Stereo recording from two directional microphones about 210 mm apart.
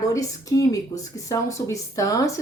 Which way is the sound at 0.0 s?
15° left (ahead or behind).